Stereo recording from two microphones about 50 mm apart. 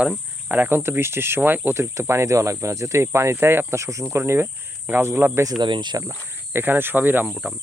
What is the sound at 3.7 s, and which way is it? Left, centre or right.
Speech, right.